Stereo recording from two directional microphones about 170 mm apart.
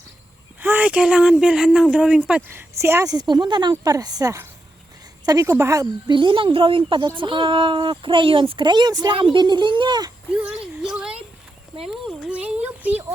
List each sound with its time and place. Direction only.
0.6 s speech: 10° right (ahead or behind); by 10.1 s 25° right (ahead or behind)
10.3 s speech: 5° right (ahead or behind)
10.8 s a sound: 5° right (ahead or behind)
11.9 s speech: centre (ahead or behind)